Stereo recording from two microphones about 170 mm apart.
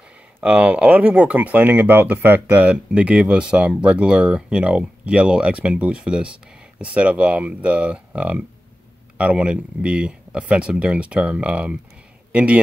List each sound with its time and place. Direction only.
0.4 s a man's voice: 10° right (ahead or behind)